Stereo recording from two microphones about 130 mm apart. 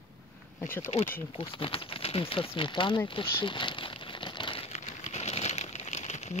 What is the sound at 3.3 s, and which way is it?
Crumpling, 40° left (ahead or behind).